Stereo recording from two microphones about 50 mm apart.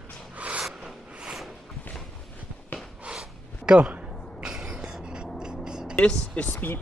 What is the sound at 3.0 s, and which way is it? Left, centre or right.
Gasp, centre.